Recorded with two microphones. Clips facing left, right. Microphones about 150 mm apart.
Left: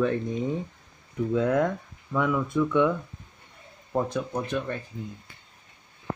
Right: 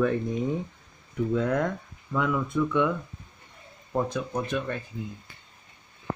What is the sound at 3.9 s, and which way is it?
Speech, 5° left (ahead or behind).